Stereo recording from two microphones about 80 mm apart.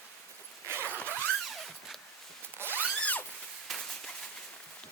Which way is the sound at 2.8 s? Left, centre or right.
Centre.